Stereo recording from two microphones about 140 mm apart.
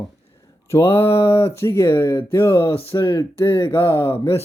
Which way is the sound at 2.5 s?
40° left (ahead or behind).